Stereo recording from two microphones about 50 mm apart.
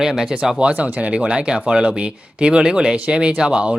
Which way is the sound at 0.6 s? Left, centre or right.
Right.